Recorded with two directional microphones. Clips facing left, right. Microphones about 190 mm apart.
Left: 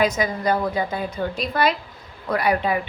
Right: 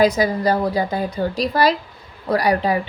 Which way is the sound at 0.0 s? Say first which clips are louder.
Right 5 dB; 35° right (ahead or behind).